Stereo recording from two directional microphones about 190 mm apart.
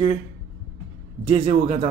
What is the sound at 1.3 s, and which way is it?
Speech, 35° right (ahead or behind).